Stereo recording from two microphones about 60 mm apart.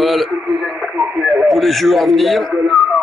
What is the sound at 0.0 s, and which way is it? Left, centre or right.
A man's voice, centre.